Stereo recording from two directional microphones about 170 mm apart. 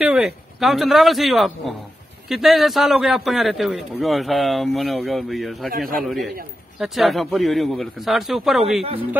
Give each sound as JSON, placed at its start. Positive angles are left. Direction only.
{"t": 0.0, "sound": "speech", "side_deg": -5}
{"t": 5.7, "sound": "a man's voice", "side_deg": -60}
{"t": 6.0, "sound": "speech", "side_deg": 0}